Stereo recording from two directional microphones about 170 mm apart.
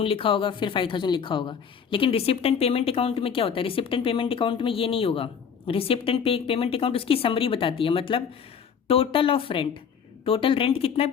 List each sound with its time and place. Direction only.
0.0 s a woman's voice: 30° left (ahead or behind)